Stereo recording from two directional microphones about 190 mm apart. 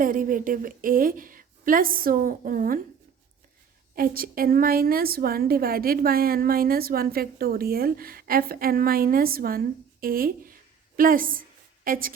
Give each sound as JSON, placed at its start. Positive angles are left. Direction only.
{"t": 0.0, "sound": "a woman's voice", "side_deg": -45}
{"t": 3.9, "sound": "a woman's voice", "side_deg": -50}